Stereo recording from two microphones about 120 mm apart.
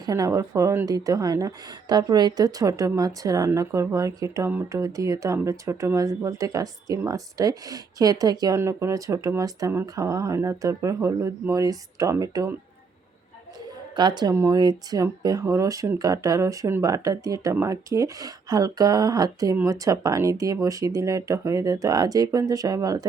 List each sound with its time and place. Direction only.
0.0 s a woman's voice: 30° right (ahead or behind)
13.9 s a woman's voice: 35° right (ahead or behind)